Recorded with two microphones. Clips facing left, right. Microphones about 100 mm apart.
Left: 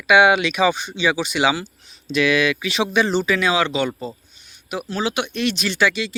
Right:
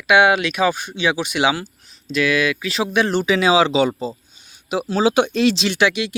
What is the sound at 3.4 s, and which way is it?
Speech, 30° right (ahead or behind).